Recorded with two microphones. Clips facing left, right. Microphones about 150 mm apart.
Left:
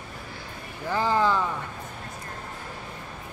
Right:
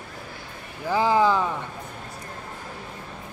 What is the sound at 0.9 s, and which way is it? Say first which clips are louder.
Speech: right 3 dB; 15° right (ahead or behind).